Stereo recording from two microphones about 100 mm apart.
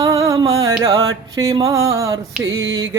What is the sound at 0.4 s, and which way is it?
Speech, 35° right (ahead or behind).